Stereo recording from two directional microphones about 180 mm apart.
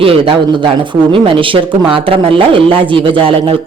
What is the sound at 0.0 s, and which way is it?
Speech, 30° right (ahead or behind).